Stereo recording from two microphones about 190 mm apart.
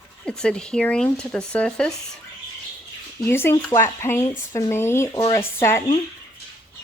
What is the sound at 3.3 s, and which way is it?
A woman's voice, 10° left (ahead or behind).